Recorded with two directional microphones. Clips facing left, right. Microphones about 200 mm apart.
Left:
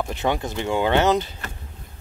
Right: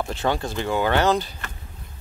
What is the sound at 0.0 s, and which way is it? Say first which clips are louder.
Speech: even; 20° left (ahead or behind).